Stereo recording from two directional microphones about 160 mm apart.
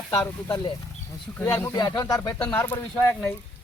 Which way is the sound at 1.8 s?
25° left (ahead or behind).